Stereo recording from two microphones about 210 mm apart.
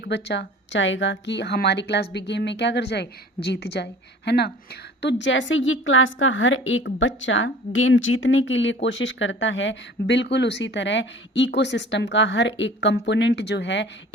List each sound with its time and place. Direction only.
0.0 s a woman's voice: 55° left (ahead or behind)